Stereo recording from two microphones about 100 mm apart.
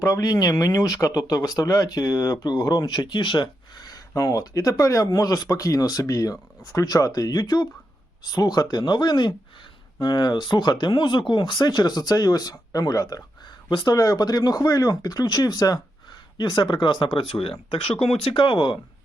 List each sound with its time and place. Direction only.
0.0 s speech: 35° left (ahead or behind)
13.7 s speech: 50° left (ahead or behind)
18.0 s speech: 70° left (ahead or behind)